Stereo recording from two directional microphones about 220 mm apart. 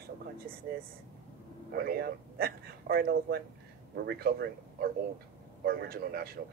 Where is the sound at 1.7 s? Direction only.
45° right (ahead or behind).